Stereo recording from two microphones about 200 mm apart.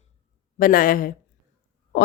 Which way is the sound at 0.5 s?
45° left (ahead or behind).